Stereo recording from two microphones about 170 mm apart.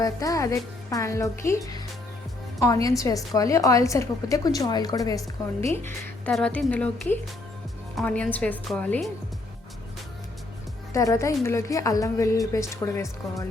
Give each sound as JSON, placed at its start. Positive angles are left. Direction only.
{"t": 0.0, "sound": "a woman's voice", "side_deg": 20}
{"t": 2.8, "sound": "a woman's voice", "side_deg": 20}
{"t": 6.3, "sound": "speech", "side_deg": 5}
{"t": 10.9, "sound": "speech", "side_deg": 20}